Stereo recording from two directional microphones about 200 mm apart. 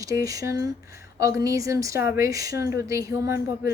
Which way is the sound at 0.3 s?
15° right (ahead or behind).